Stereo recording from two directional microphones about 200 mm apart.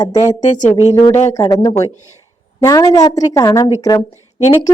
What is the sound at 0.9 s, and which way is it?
A woman's voice, 20° left (ahead or behind).